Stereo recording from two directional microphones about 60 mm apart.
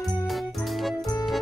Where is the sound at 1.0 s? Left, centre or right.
Left.